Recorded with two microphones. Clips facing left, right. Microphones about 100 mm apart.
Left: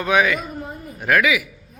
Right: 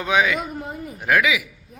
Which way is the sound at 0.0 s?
15° right (ahead or behind).